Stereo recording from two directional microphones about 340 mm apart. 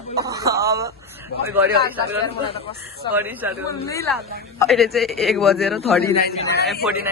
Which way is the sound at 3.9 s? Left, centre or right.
Centre.